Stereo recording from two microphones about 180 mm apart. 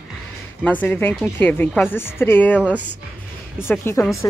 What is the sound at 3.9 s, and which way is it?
Speech, 15° left (ahead or behind).